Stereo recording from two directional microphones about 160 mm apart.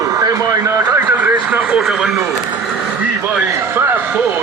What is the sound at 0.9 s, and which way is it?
Speech, 10° right (ahead or behind).